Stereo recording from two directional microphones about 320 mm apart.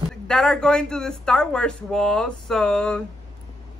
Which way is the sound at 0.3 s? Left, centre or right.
Centre.